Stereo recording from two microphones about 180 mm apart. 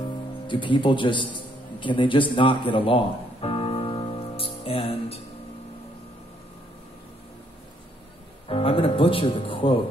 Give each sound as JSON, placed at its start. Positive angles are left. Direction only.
{"t": 0.0, "sound": "music", "side_deg": 25}
{"t": 8.5, "sound": "speech", "side_deg": 30}